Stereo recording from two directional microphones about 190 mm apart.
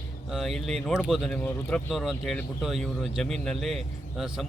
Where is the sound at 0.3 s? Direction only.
Centre (ahead or behind).